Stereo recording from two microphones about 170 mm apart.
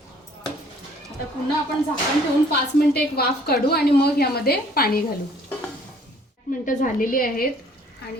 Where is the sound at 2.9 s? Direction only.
65° left (ahead or behind).